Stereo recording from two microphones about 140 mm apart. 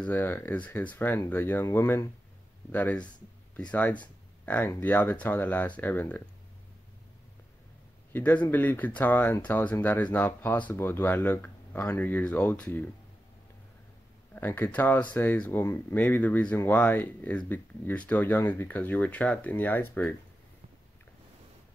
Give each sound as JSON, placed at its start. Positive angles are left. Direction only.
{"t": 0.0, "sound": "speech", "side_deg": 15}
{"t": 8.1, "sound": "speech", "side_deg": 10}
{"t": 14.3, "sound": "speech", "side_deg": 10}